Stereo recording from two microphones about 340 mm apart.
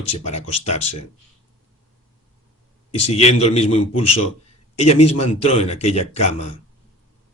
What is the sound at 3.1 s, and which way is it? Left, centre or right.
Speech, centre.